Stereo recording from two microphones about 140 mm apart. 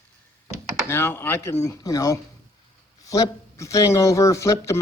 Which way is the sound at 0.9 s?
15° left (ahead or behind).